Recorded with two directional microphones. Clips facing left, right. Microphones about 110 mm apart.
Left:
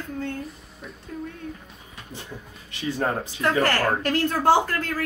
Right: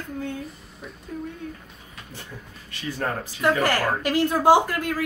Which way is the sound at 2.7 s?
20° left (ahead or behind).